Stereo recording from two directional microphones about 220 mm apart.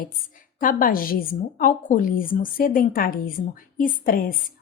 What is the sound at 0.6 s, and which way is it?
A woman's voice, 40° left (ahead or behind).